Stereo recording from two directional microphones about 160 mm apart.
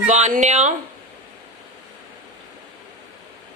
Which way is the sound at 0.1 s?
45° right (ahead or behind).